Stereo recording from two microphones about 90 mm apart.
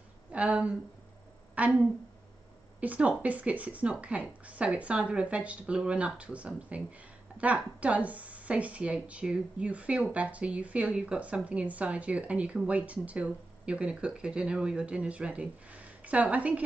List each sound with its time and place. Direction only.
0.3 s a woman's voice: 15° right (ahead or behind)
2.8 s a woman's voice: 15° right (ahead or behind)